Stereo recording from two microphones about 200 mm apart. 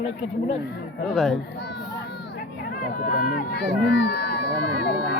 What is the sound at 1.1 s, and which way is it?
Speech, centre (ahead or behind).